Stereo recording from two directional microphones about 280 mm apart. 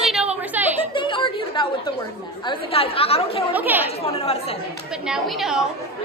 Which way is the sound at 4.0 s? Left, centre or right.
Left.